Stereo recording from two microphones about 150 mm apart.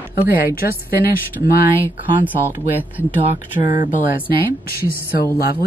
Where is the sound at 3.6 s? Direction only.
30° right (ahead or behind).